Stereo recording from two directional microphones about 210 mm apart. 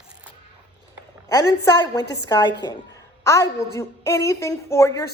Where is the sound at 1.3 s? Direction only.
15° left (ahead or behind).